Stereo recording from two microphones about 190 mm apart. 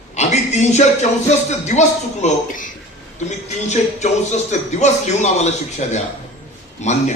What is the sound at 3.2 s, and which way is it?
Music, 35° left (ahead or behind).